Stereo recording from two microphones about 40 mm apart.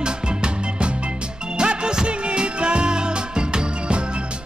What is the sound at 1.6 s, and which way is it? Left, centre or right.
Music, right.